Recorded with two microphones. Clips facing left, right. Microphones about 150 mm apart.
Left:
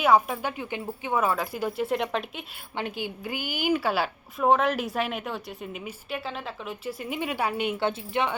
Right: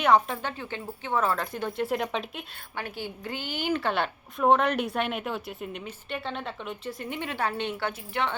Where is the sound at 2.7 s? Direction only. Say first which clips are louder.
Left 3 dB; 20° left (ahead or behind).